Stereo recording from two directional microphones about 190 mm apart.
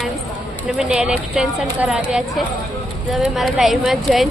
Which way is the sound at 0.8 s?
5° right (ahead or behind).